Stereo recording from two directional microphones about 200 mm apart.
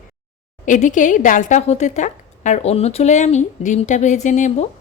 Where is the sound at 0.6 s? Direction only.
40° left (ahead or behind).